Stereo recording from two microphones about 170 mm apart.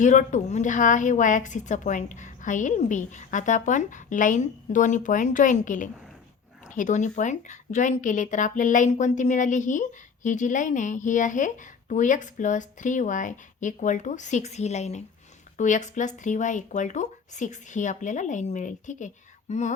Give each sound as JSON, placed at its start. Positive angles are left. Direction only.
{"t": 0.0, "sound": "a woman's voice", "side_deg": 45}